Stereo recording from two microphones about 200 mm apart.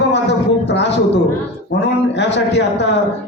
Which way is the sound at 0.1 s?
60° left (ahead or behind).